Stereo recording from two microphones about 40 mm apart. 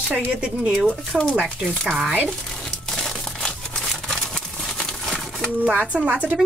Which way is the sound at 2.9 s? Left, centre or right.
Centre.